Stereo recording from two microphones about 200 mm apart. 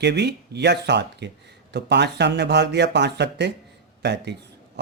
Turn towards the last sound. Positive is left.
turn(degrees=-60)  # may be behind; listen again after turning